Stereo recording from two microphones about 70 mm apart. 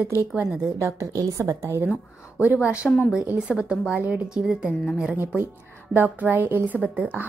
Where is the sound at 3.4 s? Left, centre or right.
Centre.